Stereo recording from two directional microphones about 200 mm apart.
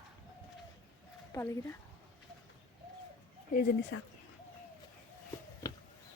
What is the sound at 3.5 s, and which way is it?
Speech, 45° left (ahead or behind).